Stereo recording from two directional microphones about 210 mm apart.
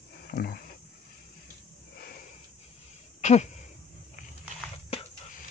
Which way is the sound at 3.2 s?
35° left (ahead or behind).